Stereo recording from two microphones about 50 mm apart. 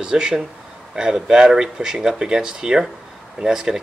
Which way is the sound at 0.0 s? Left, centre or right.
Centre.